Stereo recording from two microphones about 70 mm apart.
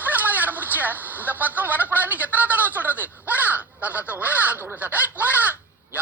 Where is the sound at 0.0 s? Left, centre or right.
Right.